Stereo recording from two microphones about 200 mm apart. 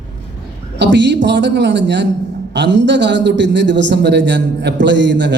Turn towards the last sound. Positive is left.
turn(degrees=-60)  # may be behind; listen again after turning